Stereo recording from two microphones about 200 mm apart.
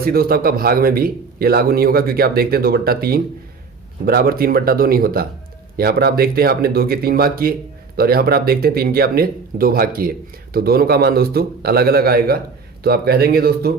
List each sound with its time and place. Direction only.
0.0 s speech: 50° right (ahead or behind)